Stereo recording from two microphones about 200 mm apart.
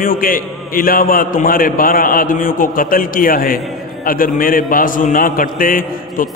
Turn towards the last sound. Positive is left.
turn(degrees=45)  # may be behind; listen again after turning